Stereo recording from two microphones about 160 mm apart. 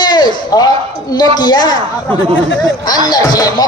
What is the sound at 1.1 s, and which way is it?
Speech, 25° left (ahead or behind).